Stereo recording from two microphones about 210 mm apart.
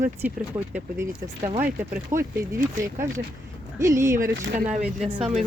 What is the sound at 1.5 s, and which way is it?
Speech, 40° right (ahead or behind).